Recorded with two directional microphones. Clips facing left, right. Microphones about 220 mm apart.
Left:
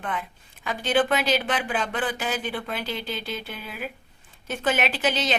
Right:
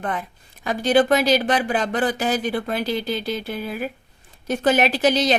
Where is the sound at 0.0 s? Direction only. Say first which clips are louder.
Right 4 dB; 40° right (ahead or behind).